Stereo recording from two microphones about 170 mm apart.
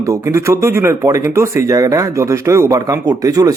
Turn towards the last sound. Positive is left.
turn(degrees=-20)  # may be behind; listen again after turning